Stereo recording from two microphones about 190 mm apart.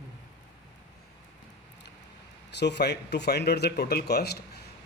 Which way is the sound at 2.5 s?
65° left (ahead or behind).